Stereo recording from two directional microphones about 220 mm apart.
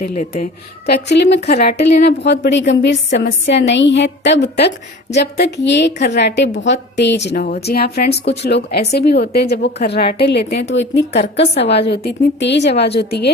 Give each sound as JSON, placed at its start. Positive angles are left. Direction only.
{"t": 0.0, "sound": "speech", "side_deg": 35}
{"t": 0.9, "sound": "a woman's voice", "side_deg": 50}
{"t": 7.3, "sound": "speech", "side_deg": 35}
{"t": 7.6, "sound": "a woman's voice", "side_deg": 45}
{"t": 11.3, "sound": "a woman's voice", "side_deg": 25}
{"t": 11.7, "sound": "a woman's voice", "side_deg": 50}